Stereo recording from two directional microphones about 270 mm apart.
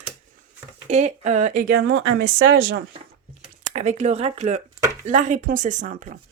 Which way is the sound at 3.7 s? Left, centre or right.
Right.